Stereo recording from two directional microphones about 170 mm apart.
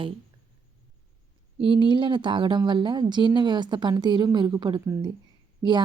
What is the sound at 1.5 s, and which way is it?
Speech, 30° right (ahead or behind).